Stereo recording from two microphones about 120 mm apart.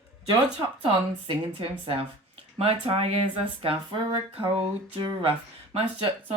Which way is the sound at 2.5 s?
55° right (ahead or behind).